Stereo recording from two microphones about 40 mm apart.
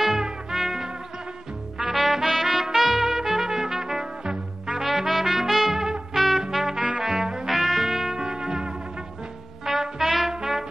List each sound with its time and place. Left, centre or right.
0.0 s music: centre
1.8 s trumpet: centre
4.8 s music: centre
6.5 s trumpet: centre
7.4 s music: centre
9.9 s music: centre